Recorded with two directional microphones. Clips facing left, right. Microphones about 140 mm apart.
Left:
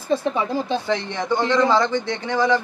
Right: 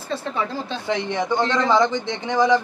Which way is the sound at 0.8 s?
15° right (ahead or behind).